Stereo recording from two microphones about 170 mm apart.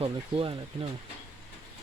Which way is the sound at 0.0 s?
35° right (ahead or behind).